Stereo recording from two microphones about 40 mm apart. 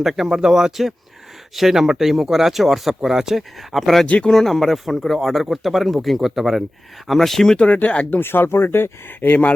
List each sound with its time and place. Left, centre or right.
0.0 s speech: centre
4.0 s speech: left
4.3 s speech: centre
7.1 s speech: centre
7.5 s speech: left
7.8 s speech: left
8.2 s speech: left